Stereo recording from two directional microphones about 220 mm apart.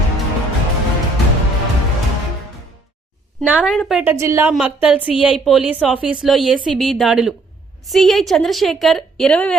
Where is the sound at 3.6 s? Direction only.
Centre (ahead or behind).